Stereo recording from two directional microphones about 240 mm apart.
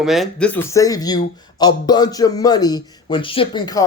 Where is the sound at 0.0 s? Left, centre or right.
Centre.